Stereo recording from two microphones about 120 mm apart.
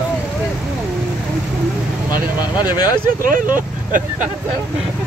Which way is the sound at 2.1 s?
35° left (ahead or behind).